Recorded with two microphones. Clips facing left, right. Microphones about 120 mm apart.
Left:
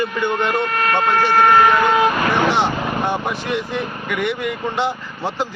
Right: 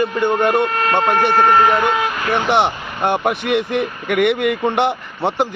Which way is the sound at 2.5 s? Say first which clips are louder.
Right 2 dB; 60° right (ahead or behind).